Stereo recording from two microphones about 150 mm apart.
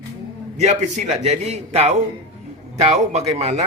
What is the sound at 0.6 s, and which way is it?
Speech, 50° right (ahead or behind).